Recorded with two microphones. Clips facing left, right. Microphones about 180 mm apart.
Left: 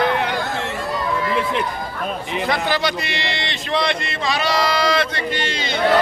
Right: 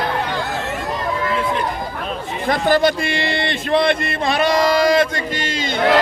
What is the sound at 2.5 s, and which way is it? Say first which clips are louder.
Speech: right 7 dB; 50° right (ahead or behind).